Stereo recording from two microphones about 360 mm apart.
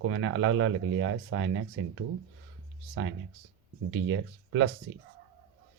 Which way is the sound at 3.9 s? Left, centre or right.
Right.